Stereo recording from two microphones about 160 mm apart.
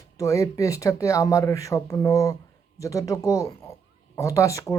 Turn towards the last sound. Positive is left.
turn(degrees=20)  # may be behind; listen again after turning